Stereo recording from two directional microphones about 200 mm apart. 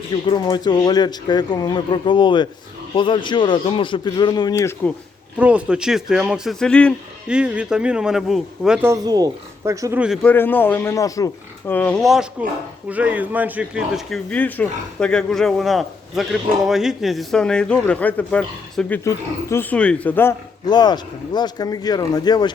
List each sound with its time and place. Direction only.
0.3 s a man's voice: 20° left (ahead or behind)
5.4 s a man's voice: 5° right (ahead or behind)
7.3 s a man's voice: 5° right (ahead or behind)
10.2 s speech: 10° left (ahead or behind)
11.7 s a man's voice: 5° left (ahead or behind)
20.7 s a man's voice: 20° left (ahead or behind)